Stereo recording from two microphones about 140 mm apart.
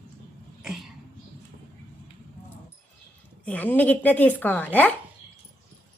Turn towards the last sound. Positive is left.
turn(degrees=10)  # may be behind; listen again after turning